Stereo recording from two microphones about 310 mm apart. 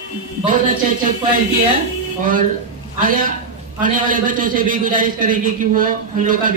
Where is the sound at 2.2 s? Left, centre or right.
Right.